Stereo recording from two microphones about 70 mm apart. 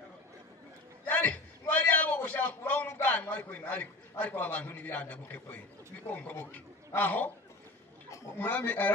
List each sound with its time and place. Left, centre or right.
1.0 s a sound: left
6.0 s speech: left
8.4 s speech: left